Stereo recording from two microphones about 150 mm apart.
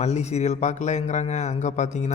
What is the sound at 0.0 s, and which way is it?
A man's voice, 45° left (ahead or behind).